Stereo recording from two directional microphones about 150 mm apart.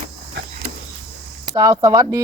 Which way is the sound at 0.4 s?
90° right.